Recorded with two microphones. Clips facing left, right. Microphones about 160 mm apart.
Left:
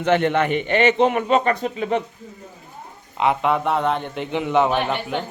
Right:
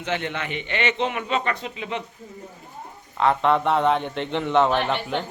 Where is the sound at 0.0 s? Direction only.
55° left (ahead or behind).